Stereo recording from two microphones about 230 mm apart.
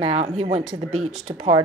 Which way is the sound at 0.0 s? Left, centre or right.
Right.